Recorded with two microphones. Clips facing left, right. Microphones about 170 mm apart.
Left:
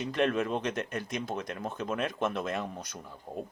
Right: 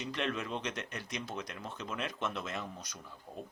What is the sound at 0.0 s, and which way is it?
Speech, 50° left (ahead or behind).